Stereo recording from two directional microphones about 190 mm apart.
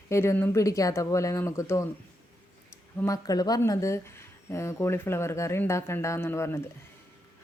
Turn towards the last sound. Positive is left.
turn(degrees=15)  # may be behind; listen again after turning